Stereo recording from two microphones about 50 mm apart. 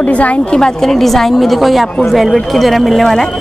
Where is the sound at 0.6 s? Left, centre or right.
Centre.